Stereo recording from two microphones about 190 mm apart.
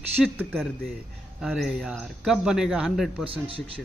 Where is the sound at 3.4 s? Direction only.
30° right (ahead or behind).